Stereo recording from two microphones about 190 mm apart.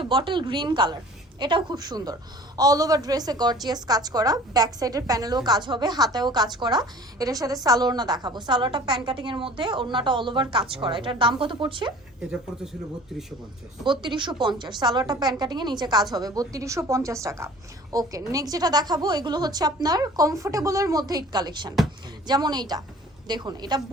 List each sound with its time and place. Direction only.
0.0 s a woman's voice: 25° right (ahead or behind)
13.8 s a woman's voice: 25° right (ahead or behind)